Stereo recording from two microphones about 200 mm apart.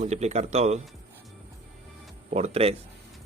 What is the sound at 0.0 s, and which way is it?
Speech, 35° right (ahead or behind).